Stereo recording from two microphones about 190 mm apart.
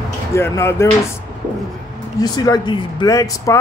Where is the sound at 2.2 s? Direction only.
20° left (ahead or behind).